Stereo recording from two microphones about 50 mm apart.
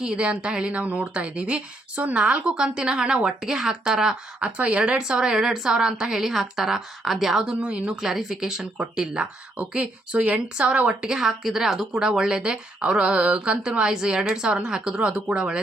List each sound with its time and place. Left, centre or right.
0.0 s a woman's voice: centre
7.6 s speech: right
8.0 s a woman's voice: centre
9.6 s speech: right